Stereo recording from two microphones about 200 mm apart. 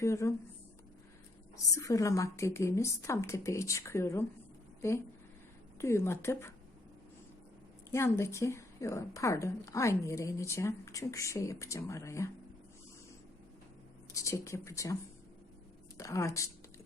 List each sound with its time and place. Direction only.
0.0 s a woman's voice: 15° left (ahead or behind)
1.7 s a woman's voice: 15° left (ahead or behind)
7.9 s a woman's voice: 15° left (ahead or behind)
14.1 s a woman's voice: 15° left (ahead or behind)
16.0 s a woman's voice: 15° left (ahead or behind)